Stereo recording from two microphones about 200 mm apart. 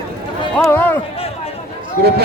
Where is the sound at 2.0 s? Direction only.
55° right (ahead or behind).